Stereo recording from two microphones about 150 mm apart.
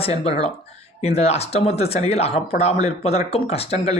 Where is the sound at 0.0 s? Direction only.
45° left (ahead or behind).